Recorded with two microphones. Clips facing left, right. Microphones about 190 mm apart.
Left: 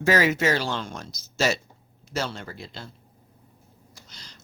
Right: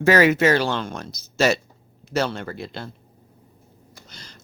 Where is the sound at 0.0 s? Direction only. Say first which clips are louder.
Right 5 dB; 60° right (ahead or behind).